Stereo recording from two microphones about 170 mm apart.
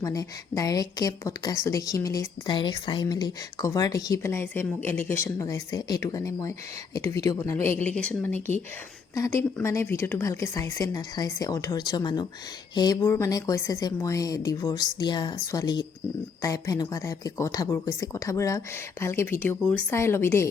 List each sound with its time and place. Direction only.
0.0 s a woman's voice: 20° left (ahead or behind)